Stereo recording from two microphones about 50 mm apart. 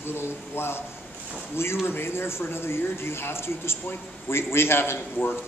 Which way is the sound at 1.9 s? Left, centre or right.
Left.